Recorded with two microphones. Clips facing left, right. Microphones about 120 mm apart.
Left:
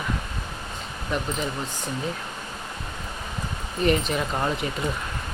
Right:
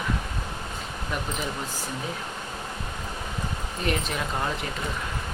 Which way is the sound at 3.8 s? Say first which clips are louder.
Left 7 dB; centre (ahead or behind).